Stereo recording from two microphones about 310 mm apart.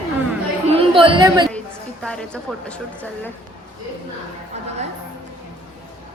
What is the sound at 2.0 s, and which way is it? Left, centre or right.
A woman's voice, centre.